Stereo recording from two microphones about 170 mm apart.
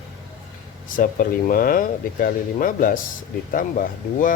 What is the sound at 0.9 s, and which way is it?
Speech, 55° left (ahead or behind).